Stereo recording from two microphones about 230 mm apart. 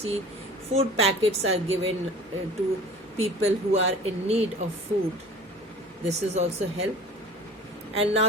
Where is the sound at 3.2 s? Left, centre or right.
Right.